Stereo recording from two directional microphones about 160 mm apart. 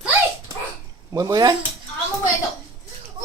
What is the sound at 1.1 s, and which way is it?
Speech, 25° right (ahead or behind).